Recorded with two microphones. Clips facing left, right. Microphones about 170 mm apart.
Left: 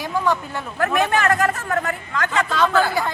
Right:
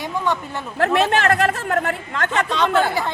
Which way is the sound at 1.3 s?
70° right (ahead or behind).